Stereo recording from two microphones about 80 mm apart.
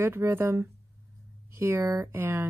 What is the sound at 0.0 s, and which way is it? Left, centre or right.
Speech, right.